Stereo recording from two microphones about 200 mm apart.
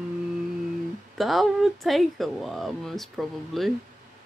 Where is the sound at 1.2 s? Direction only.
Centre (ahead or behind).